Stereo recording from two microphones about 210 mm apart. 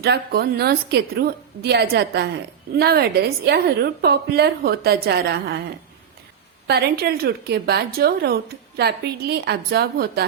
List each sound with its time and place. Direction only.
0.0 s a woman's voice: 50° right (ahead or behind)